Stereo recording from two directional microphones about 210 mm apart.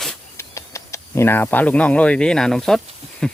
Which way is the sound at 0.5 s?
15° left (ahead or behind).